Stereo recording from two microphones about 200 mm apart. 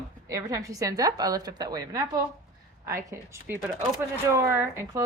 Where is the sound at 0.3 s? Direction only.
15° right (ahead or behind).